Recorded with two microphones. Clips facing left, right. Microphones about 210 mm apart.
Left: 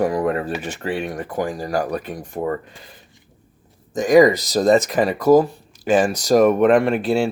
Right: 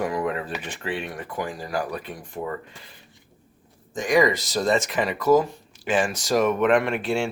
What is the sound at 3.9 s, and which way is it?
Speech, 40° left (ahead or behind).